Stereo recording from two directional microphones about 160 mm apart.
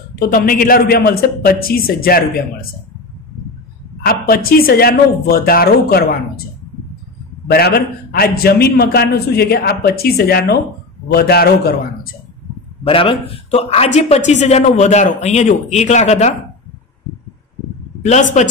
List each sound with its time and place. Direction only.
0.1 s a man's voice: 65° left (ahead or behind)
4.0 s a man's voice: 70° left (ahead or behind)
7.4 s a man's voice: 85° left
12.8 s a man's voice: 35° left (ahead or behind)
18.0 s a man's voice: 50° left (ahead or behind)